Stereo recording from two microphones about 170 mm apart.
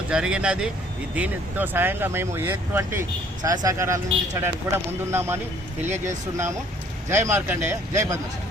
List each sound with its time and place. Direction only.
0.1 s speech: 5° right (ahead or behind)